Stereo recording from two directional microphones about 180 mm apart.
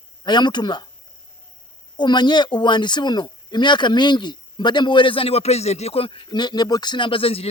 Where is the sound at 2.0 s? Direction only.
25° left (ahead or behind).